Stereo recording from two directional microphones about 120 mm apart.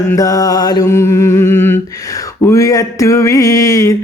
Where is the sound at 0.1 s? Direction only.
30° left (ahead or behind).